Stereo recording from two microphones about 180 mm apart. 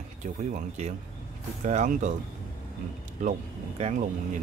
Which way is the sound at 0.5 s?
40° right (ahead or behind).